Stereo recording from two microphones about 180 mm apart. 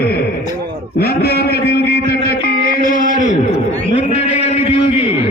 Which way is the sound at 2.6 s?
50° left (ahead or behind).